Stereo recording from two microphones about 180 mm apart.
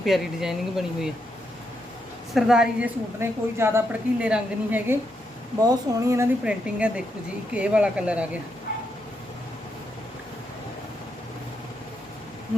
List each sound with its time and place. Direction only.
0.0 s speech: centre (ahead or behind)
2.3 s a woman's voice: 5° right (ahead or behind)